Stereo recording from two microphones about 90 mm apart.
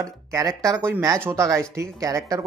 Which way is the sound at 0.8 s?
25° right (ahead or behind).